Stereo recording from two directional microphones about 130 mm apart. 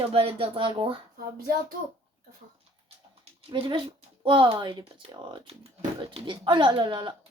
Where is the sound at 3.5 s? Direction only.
40° right (ahead or behind).